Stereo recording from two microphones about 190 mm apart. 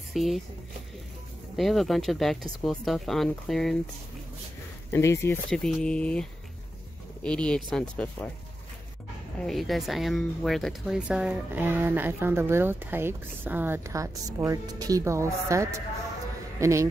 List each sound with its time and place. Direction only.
0.1 s speech: centre (ahead or behind)
1.6 s speech: centre (ahead or behind)
4.9 s speech: 15° left (ahead or behind)
5.5 s speech: 5° left (ahead or behind)
7.2 s speech: 5° left (ahead or behind)
9.4 s a man's voice: centre (ahead or behind); by 16.8 s 15° right (ahead or behind)